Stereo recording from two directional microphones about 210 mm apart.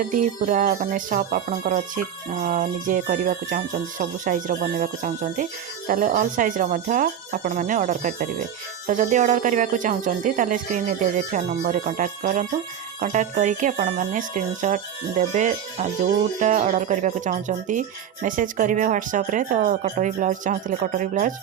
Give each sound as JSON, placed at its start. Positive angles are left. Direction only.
{"t": 0.1, "sound": "music", "side_deg": -40}